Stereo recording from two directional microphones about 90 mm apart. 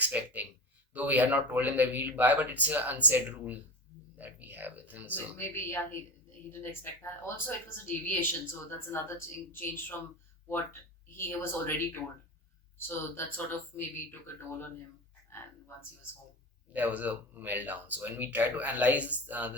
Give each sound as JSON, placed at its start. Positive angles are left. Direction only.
{"t": 0.0, "sound": "a sound", "side_deg": -20}
{"t": 0.9, "sound": "speech", "side_deg": -20}
{"t": 4.2, "sound": "a sound", "side_deg": -20}
{"t": 5.1, "sound": "speech", "side_deg": 25}
{"t": 12.9, "sound": "speech", "side_deg": 25}
{"t": 16.7, "sound": "speech", "side_deg": -20}